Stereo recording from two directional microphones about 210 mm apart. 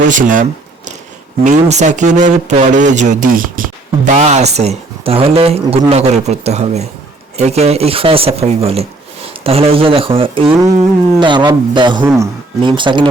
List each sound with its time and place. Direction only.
0.1 s a man's voice: 40° right (ahead or behind)
1.5 s a man's voice: 35° right (ahead or behind)